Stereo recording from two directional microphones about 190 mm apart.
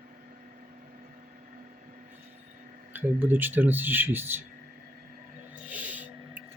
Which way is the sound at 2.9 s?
10° right (ahead or behind).